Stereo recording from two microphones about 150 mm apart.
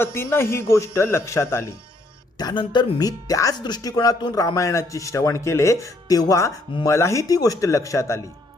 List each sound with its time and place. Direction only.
0.0 s speech: 15° left (ahead or behind)
2.4 s speech: 30° left (ahead or behind)